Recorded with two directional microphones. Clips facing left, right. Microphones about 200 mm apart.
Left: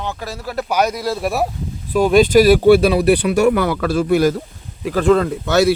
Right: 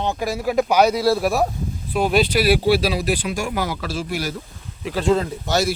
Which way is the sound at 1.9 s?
45° left (ahead or behind).